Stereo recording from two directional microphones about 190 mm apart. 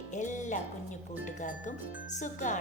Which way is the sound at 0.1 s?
40° left (ahead or behind).